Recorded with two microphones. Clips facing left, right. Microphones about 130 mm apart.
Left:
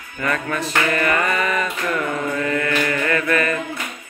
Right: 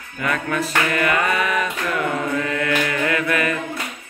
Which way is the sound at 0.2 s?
5° right (ahead or behind).